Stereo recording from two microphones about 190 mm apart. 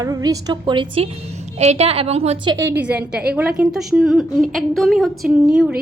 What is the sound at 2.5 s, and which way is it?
A woman's voice, 10° right (ahead or behind).